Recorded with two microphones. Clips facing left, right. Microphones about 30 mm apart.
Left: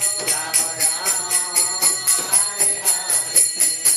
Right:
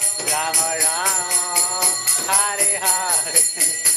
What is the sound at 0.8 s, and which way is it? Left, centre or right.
Jingle bell, right.